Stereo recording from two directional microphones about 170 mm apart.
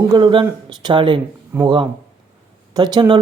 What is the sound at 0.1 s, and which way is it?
Speech, 30° right (ahead or behind).